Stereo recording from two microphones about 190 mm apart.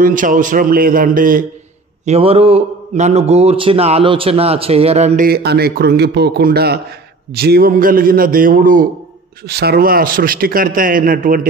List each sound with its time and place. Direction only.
0.0 s a man's voice: 45° right (ahead or behind)
2.0 s a man's voice: 30° right (ahead or behind)
9.5 s a man's voice: 55° right (ahead or behind)